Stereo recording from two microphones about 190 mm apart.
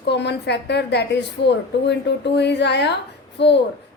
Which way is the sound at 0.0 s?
60° left (ahead or behind).